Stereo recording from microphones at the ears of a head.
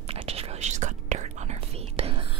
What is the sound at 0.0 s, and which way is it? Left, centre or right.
Whispering, right.